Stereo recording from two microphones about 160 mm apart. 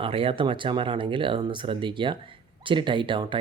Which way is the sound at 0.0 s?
35° right (ahead or behind).